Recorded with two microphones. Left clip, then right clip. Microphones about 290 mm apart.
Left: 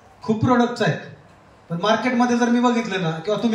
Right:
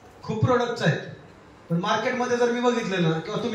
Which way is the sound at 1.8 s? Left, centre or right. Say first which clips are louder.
Left 5 dB; left.